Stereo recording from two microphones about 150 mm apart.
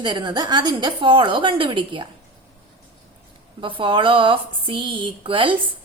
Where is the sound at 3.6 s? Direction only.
35° right (ahead or behind).